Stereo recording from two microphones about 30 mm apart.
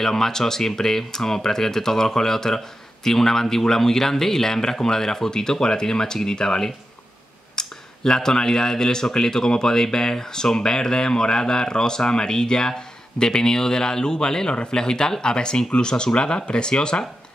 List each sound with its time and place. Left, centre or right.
0.0 s speech: centre